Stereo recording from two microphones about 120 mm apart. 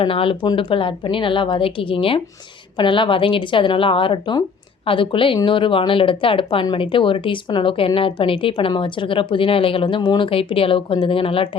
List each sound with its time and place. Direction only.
0.0 s a woman's voice: 50° left (ahead or behind)